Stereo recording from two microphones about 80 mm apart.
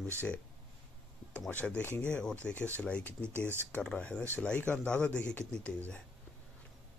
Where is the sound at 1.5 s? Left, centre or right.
Centre.